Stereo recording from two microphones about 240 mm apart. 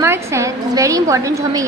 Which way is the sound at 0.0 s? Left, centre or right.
Centre.